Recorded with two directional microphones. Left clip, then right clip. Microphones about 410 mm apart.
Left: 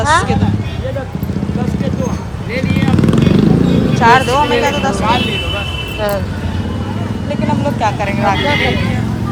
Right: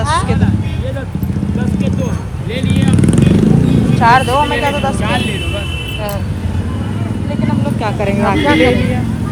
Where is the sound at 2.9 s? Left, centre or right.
Left.